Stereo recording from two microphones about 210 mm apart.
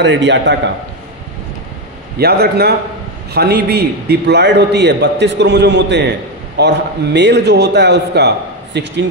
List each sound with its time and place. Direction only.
0.0 s a man's voice: 60° right (ahead or behind)
2.1 s a man's voice: 50° right (ahead or behind)